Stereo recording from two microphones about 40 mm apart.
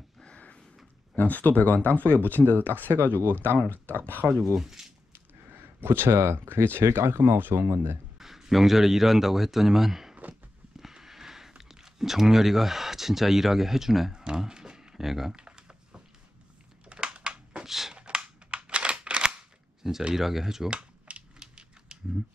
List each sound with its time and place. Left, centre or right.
1.1 s speech: left
2.5 s speech: right
3.7 s speech: left
4.6 s speech: centre
5.8 s speech: right
8.2 s speech: centre
10.8 s a sound: centre
14.1 s computer keyboard: centre
15.3 s typing: right
16.9 s crushing: right
17.6 s a sound: centre
17.9 s scissors: right
19.8 s speech: centre
21.4 s typewriter: right